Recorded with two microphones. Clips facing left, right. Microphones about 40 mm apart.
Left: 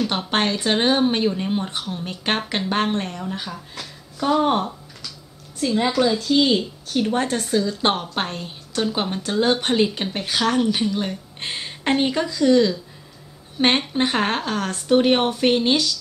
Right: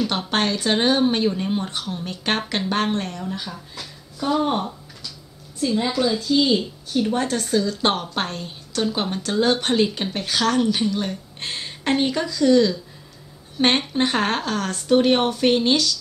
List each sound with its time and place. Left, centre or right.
0.3 s a woman's voice: left
4.2 s a woman's voice: left
8.8 s a woman's voice: centre